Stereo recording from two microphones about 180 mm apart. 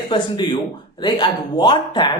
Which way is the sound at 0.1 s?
25° left (ahead or behind).